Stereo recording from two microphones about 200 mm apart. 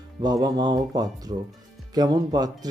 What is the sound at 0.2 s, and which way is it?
Speech, 20° right (ahead or behind).